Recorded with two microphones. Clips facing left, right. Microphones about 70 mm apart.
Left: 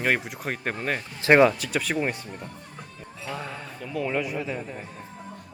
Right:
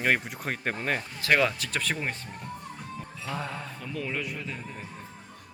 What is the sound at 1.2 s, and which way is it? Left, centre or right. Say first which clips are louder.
Speech: left 8 dB; left.